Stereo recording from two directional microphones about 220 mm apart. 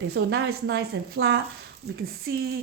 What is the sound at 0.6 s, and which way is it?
Speech, 50° right (ahead or behind).